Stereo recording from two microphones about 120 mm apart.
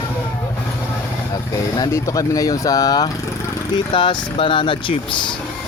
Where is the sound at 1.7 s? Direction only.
30° left (ahead or behind).